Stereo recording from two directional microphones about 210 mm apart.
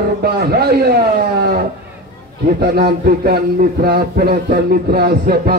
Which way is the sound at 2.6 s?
50° right (ahead or behind).